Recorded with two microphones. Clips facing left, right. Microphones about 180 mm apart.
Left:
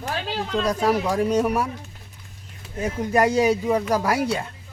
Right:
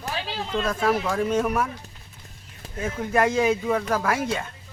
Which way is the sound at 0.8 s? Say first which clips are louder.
Left 1 dB; 15° left (ahead or behind).